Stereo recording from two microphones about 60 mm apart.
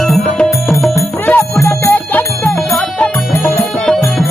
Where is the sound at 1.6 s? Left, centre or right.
Left.